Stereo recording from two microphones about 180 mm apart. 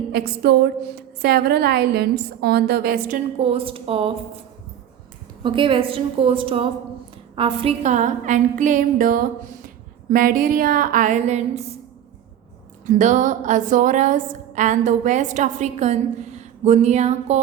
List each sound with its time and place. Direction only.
0.1 s a woman's voice: 60° right (ahead or behind)
3.3 s speech: 35° right (ahead or behind)
5.4 s a woman's voice: 25° right (ahead or behind)
12.8 s a woman's voice: 45° right (ahead or behind)